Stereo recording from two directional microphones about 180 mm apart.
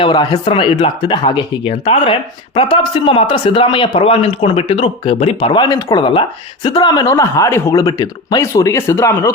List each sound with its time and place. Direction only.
0.0 s a man's voice: 25° left (ahead or behind)